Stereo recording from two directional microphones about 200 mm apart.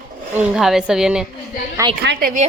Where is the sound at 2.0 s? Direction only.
50° right (ahead or behind).